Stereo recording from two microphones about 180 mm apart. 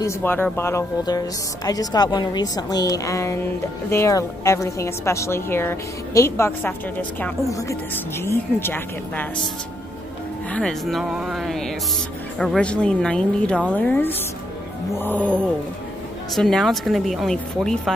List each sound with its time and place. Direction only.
0.0 s a woman's voice: 10° left (ahead or behind)
10.5 s a woman's voice: 5° left (ahead or behind)
16.3 s a woman's voice: centre (ahead or behind)